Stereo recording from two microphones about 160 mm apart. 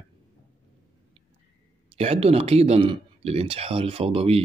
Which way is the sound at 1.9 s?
40° right (ahead or behind).